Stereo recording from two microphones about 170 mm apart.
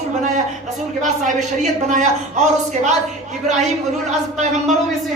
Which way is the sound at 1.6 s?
45° right (ahead or behind).